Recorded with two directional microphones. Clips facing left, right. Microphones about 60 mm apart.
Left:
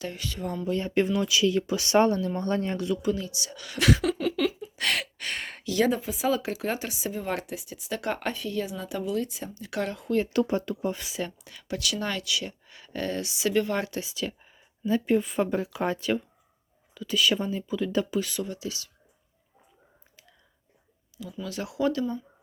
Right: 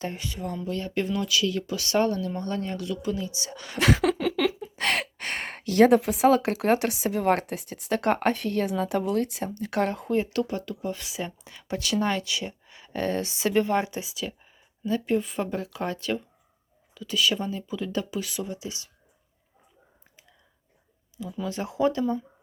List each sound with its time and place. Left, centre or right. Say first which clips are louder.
0.0 s speech: right 2 dB; right
0.4 s speech: left 1 dB; centre
0.7 s speech: left 4 dB; left
3.0 s speech: left 2 dB; centre
3.3 s speech: right 2 dB; right
4.8 s gasp: right 2 dB; right
6.0 s speech: right 6 dB; right
10.4 s speech: left 3 dB; left
10.9 s speech: left 1 dB; centre
11.3 s speech: right 2 dB; right
14.0 s speech: left 1 dB; centre; by 18.9 s right
21.4 s speech: right 2 dB; right